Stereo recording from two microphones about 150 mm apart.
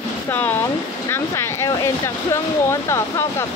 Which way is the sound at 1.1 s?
15° left (ahead or behind).